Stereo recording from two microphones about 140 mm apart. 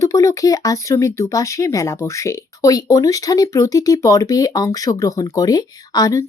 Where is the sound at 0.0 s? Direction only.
25° left (ahead or behind).